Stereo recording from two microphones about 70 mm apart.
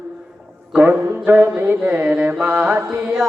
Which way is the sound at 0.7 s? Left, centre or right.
Right.